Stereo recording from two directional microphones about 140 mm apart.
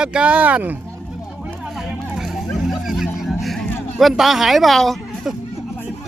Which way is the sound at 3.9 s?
Centre (ahead or behind).